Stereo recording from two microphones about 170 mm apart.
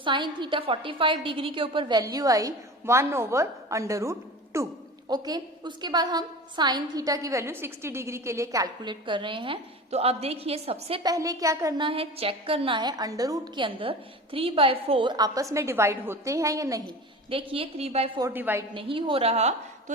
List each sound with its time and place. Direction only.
0.0 s a woman's voice: 30° right (ahead or behind)
11.0 s a woman's voice: 20° right (ahead or behind)
11.9 s a woman's voice: 35° right (ahead or behind)
17.2 s a woman's voice: 30° right (ahead or behind)
18.3 s a woman's voice: 10° right (ahead or behind)
18.7 s a woman's voice: 30° right (ahead or behind)